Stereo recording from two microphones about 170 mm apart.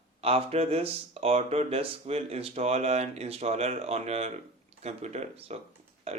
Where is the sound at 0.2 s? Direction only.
35° right (ahead or behind).